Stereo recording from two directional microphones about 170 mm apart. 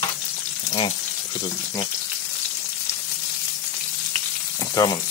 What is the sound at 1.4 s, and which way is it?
Speech, 25° left (ahead or behind).